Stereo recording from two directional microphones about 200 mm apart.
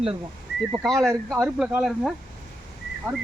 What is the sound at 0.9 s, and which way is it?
Speech, 15° right (ahead or behind).